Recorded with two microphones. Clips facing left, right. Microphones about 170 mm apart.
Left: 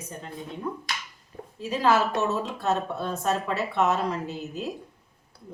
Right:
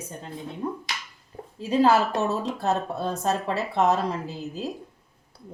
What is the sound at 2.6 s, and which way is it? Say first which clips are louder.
Speech: right 1 dB; 35° right (ahead or behind).